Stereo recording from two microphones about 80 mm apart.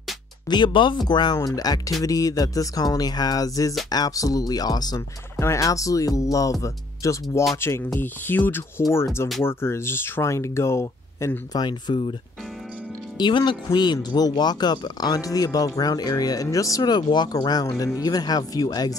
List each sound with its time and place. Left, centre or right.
0.5 s speech: left
5.4 s speech: left
7.6 s speech: left
11.5 s speech: left
13.4 s speech: left
13.9 s speech: left